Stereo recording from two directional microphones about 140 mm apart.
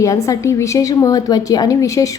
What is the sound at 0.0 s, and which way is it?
A woman's voice, 25° left (ahead or behind).